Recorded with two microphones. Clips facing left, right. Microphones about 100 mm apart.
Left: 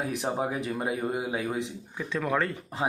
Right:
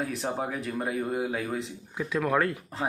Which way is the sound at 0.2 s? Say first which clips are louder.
Left 2 dB; 15° left (ahead or behind).